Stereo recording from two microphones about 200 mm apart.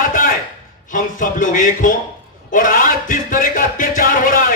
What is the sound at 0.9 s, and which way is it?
A man's voice, 40° left (ahead or behind).